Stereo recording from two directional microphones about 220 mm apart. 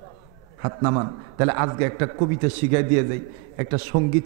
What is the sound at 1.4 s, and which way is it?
Speech, 15° right (ahead or behind).